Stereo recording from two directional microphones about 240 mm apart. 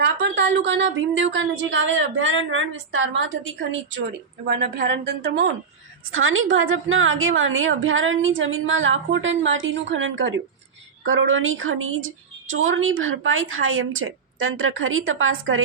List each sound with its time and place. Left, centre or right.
0.0 s speech: right
6.1 s a woman's voice: right